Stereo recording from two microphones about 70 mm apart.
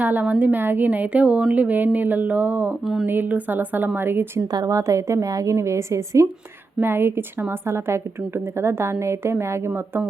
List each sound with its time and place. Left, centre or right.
0.0 s a woman's voice: right
2.8 s speech: centre
3.1 s a woman's voice: right
4.5 s a woman's voice: right
6.7 s a woman's voice: right